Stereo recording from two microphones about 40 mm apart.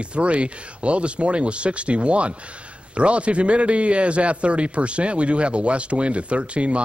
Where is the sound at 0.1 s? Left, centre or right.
Right.